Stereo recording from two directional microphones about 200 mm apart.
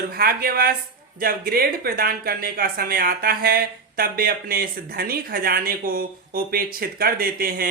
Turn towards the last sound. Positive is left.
turn(degrees=-45)  # may be behind; listen again after turning